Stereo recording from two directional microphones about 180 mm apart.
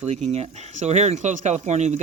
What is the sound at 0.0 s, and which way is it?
Speech, 40° right (ahead or behind).